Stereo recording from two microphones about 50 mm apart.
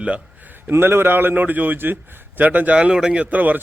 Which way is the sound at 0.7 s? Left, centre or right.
Right.